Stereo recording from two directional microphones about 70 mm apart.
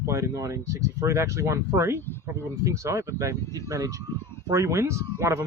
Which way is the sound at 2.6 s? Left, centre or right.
Right.